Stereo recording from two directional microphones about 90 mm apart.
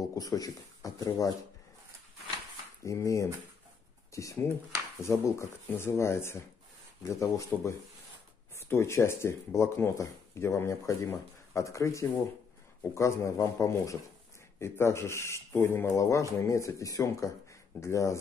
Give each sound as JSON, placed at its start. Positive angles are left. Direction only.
{"t": 0.2, "sound": "speech", "side_deg": 40}
{"t": 2.8, "sound": "speech", "side_deg": 35}